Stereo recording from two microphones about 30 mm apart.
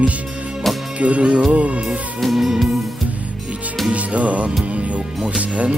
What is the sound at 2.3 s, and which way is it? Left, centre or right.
Music, centre.